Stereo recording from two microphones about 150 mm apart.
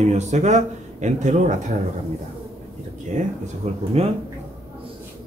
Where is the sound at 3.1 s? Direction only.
50° right (ahead or behind).